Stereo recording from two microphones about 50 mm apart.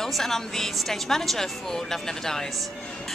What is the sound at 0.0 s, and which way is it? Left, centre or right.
A woman's voice, centre.